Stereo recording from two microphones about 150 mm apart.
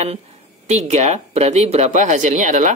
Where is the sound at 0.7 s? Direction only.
50° right (ahead or behind).